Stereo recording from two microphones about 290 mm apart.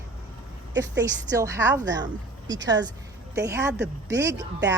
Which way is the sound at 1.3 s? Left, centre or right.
Centre.